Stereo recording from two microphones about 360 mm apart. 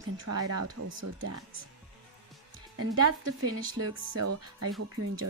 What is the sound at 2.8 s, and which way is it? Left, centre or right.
Speech, right.